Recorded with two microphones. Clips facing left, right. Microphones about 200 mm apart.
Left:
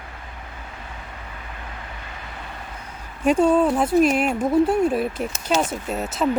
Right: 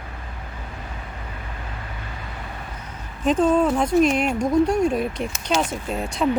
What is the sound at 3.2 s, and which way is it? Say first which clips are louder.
Speech: left 1 dB; 10° left (ahead or behind).